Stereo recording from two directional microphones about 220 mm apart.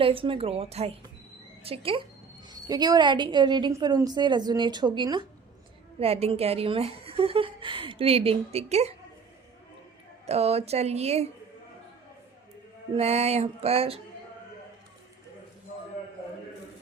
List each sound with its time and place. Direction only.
0.0 s a woman's voice: 25° right (ahead or behind)
10.2 s a woman's voice: 30° right (ahead or behind)
12.9 s a woman's voice: 30° right (ahead or behind)